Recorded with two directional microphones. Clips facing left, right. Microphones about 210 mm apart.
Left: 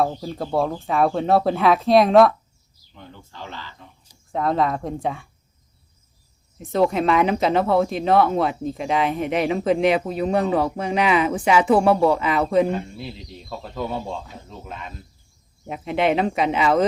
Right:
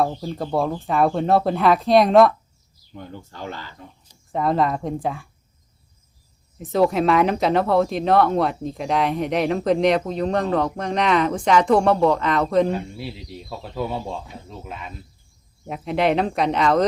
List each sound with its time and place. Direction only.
0.0 s speech: centre (ahead or behind)
2.9 s speech: 45° right (ahead or behind)
4.3 s speech: centre (ahead or behind)
6.6 s speech: centre (ahead or behind)
12.7 s speech: 5° right (ahead or behind)